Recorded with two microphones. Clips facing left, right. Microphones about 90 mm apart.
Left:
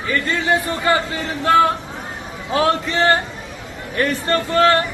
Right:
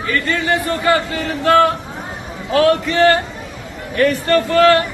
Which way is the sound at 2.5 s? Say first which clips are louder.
Right 4 dB; 25° left (ahead or behind).